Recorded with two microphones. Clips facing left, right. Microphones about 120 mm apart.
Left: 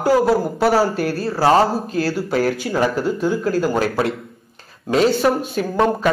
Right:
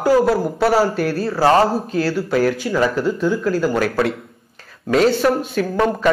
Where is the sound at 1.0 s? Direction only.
40° left (ahead or behind).